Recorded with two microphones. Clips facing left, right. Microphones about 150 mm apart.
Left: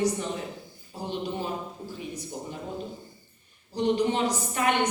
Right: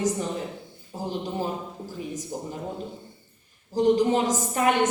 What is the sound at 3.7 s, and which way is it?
A woman's voice, 45° right (ahead or behind).